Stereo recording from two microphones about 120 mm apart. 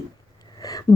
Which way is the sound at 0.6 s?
30° left (ahead or behind).